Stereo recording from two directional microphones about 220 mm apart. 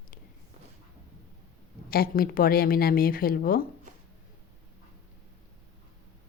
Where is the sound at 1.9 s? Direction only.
40° left (ahead or behind).